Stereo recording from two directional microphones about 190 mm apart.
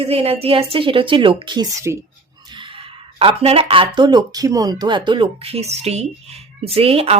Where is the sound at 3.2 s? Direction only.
30° right (ahead or behind).